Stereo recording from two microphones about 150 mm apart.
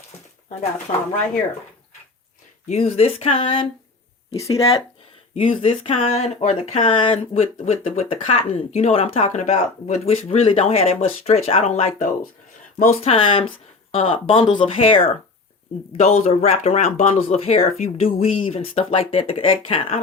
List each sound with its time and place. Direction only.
0.9 s speech: 45° left (ahead or behind)
2.6 s speech: 45° left (ahead or behind)
4.3 s speech: 20° left (ahead or behind)
5.3 s speech: 40° left (ahead or behind)